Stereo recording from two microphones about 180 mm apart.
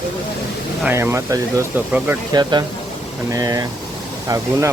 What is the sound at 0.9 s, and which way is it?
Speech, 15° right (ahead or behind).